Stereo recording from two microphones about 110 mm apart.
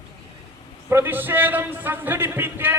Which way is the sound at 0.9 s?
20° right (ahead or behind).